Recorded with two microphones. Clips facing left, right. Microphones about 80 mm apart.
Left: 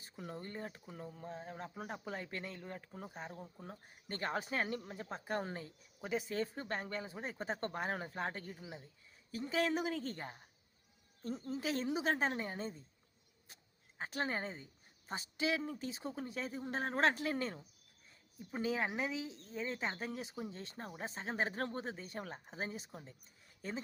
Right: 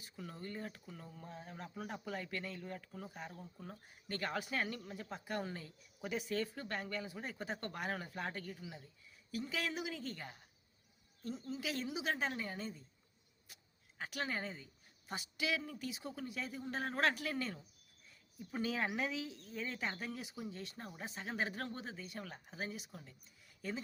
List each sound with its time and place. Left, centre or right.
0.0 s a man's voice: left
14.0 s speech: left
18.5 s a man's voice: left